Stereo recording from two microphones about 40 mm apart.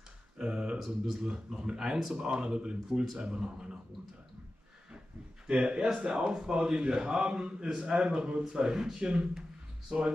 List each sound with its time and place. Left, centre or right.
0.4 s a sound: centre
0.7 s speech: centre
1.2 s a man's voice: right
1.8 s a man's voice: centre
5.5 s a man's voice: right
8.6 s a man's voice: centre